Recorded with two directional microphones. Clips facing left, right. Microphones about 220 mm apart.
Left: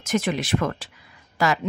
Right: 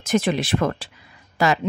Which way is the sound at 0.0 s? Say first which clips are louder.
Right 3 dB; 30° right (ahead or behind).